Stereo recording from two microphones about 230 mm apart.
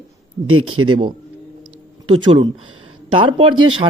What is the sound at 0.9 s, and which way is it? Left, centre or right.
Speech, right.